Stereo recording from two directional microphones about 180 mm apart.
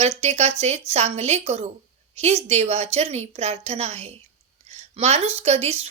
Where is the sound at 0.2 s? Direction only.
35° right (ahead or behind).